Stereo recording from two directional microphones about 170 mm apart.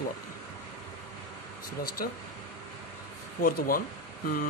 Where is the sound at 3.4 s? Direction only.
60° left (ahead or behind).